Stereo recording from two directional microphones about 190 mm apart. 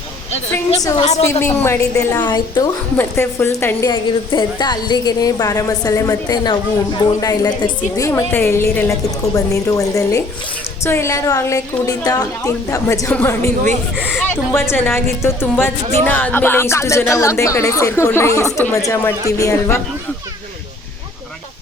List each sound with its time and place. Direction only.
0.8 s a woman's voice: 20° left (ahead or behind)
4.3 s a woman's voice: 25° left (ahead or behind)